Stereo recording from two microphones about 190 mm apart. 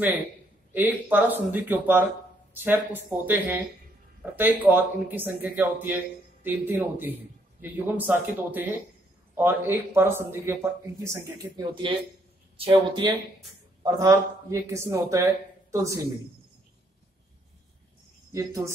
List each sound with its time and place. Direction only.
0.7 s a man's voice: 10° right (ahead or behind)
11.7 s speech: 25° right (ahead or behind)
13.8 s a man's voice: 15° right (ahead or behind)
18.3 s a man's voice: 15° right (ahead or behind)